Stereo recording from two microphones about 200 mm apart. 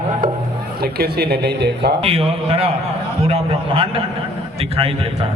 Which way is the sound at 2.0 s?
30° right (ahead or behind).